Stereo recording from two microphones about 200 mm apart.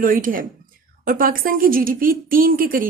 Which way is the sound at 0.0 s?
45° right (ahead or behind).